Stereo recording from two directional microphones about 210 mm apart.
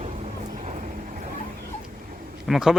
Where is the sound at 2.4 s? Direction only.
Centre (ahead or behind).